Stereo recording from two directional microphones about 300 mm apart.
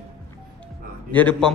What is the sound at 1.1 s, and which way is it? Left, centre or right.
Speech, centre.